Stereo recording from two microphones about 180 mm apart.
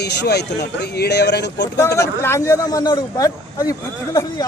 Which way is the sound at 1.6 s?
20° left (ahead or behind).